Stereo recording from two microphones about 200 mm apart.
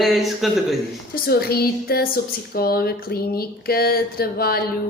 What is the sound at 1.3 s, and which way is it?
Speech, 50° left (ahead or behind).